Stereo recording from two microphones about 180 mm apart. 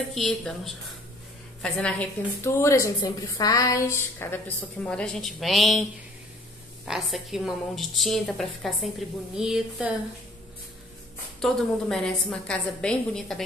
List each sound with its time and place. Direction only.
0.1 s a woman's voice: centre (ahead or behind)
6.9 s a woman's voice: centre (ahead or behind)
11.4 s a woman's voice: 5° left (ahead or behind)